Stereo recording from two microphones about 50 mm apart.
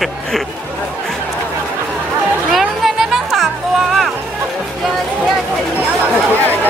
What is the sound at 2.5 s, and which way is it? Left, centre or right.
Music, centre.